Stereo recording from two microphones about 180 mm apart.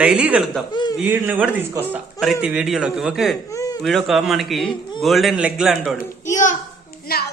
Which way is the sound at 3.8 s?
Centre (ahead or behind).